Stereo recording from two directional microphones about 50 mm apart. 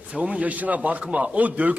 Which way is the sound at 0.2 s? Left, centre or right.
Right.